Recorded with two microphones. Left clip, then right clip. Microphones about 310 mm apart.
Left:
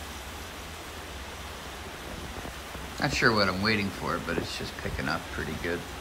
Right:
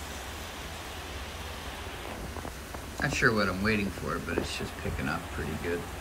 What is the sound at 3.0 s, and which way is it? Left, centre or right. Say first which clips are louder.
Speech: left 2 dB; centre.